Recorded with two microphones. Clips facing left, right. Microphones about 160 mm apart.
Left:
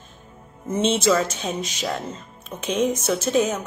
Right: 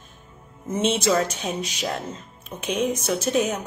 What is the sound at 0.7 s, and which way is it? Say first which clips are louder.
A woman's voice: left 2 dB; 10° right (ahead or behind).